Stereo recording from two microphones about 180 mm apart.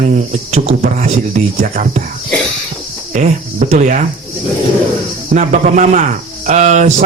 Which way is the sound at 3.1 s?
40° right (ahead or behind).